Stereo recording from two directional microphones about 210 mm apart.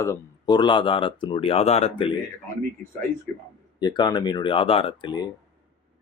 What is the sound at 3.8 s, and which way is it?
Speech, 20° left (ahead or behind).